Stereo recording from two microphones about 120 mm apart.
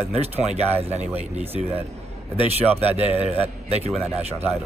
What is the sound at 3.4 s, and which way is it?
Speech, 60° right (ahead or behind).